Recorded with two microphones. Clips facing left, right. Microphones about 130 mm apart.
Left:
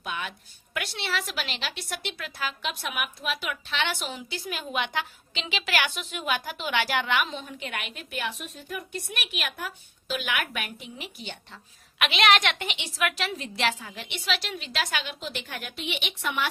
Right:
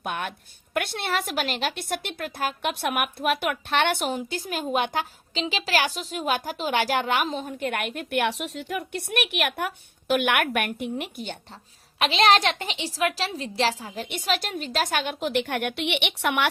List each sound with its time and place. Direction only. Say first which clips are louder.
0.0 s a woman's voice: right 4 dB; 55° right (ahead or behind)
11.9 s a woman's voice: right 3 dB; 35° right (ahead or behind); by 16.5 s 70° right (ahead or behind)